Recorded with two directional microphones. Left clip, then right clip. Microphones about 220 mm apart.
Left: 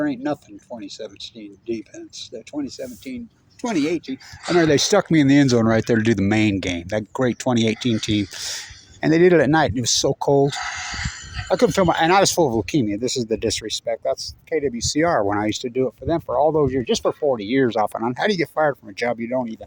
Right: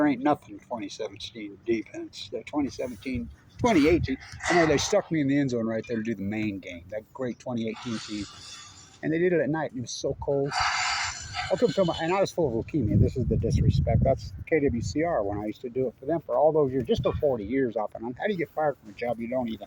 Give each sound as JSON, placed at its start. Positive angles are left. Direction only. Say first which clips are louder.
{"t": 0.0, "sound": "speech", "louder": "even", "side_deg": 15}
{"t": 4.6, "sound": "speech", "louder": "left 6 dB", "side_deg": 45}
{"t": 10.6, "sound": "a sound", "louder": "right 2 dB", "side_deg": -50}
{"t": 11.5, "sound": "speech", "louder": "left 8 dB", "side_deg": 50}
{"t": 14.9, "sound": "speech", "louder": "left 11 dB", "side_deg": 50}
{"t": 17.2, "sound": "speech", "louder": "left 7 dB", "side_deg": 60}
{"t": 19.3, "sound": "speech", "louder": "left 6 dB", "side_deg": 35}